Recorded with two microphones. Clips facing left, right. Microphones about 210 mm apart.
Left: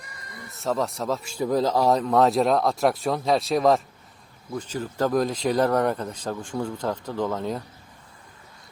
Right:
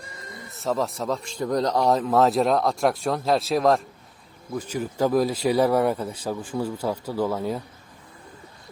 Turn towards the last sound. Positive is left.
turn(degrees=-5)  # may be behind; listen again after turning